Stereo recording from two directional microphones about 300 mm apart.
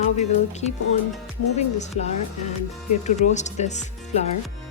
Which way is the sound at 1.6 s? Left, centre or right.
Left.